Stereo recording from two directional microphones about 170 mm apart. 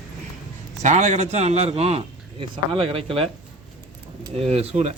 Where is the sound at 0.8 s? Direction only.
40° right (ahead or behind).